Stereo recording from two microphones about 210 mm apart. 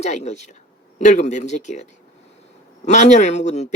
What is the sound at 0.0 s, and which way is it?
Speech, 35° left (ahead or behind).